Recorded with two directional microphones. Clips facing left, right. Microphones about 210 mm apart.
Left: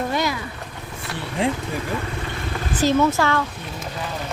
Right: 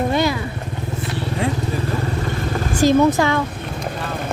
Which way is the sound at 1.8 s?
35° right (ahead or behind).